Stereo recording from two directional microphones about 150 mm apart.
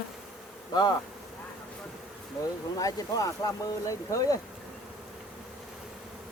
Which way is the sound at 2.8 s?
25° left (ahead or behind).